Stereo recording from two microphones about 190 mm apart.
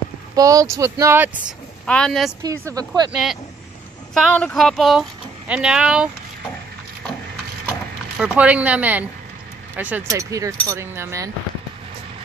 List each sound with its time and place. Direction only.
0.4 s speech: 20° right (ahead or behind)
1.9 s speech: 5° left (ahead or behind)
2.4 s a woman's voice: 20° right (ahead or behind)
3.1 s speech: 5° right (ahead or behind)
8.2 s speech: 5° right (ahead or behind)